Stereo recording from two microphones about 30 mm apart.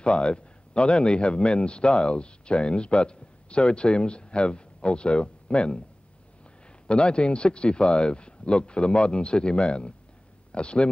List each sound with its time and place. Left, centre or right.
0.0 s a man's voice: left
6.9 s a man's voice: left